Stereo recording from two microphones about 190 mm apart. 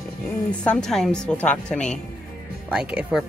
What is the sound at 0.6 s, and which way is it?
Speech, 5° left (ahead or behind).